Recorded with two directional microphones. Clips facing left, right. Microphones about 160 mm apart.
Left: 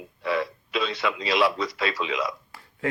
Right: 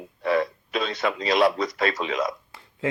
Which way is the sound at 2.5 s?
20° right (ahead or behind).